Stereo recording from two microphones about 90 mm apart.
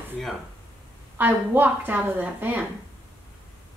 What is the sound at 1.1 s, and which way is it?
A woman's voice, 20° right (ahead or behind).